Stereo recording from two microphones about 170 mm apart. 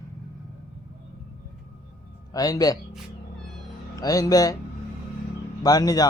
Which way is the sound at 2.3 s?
20° left (ahead or behind).